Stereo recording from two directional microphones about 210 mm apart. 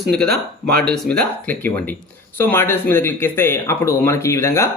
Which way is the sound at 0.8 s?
5° left (ahead or behind).